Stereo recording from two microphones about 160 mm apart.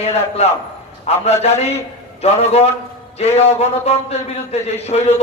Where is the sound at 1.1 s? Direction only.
40° left (ahead or behind).